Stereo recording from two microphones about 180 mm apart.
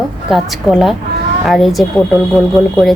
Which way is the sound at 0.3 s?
Centre (ahead or behind).